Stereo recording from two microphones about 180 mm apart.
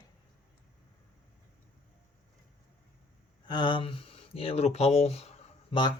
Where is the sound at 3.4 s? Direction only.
25° left (ahead or behind).